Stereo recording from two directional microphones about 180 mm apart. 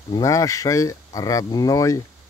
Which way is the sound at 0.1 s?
20° left (ahead or behind).